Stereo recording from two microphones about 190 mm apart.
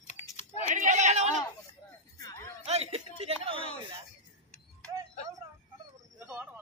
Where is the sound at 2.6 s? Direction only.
35° right (ahead or behind).